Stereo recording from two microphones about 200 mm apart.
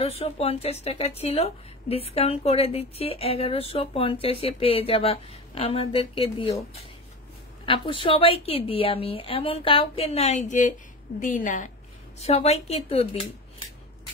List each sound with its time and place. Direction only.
0.0 s speech: 30° left (ahead or behind)
7.6 s speech: 25° left (ahead or behind)